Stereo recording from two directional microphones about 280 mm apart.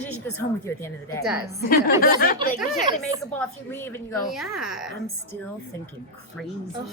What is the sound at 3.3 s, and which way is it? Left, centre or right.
A woman's voice, centre.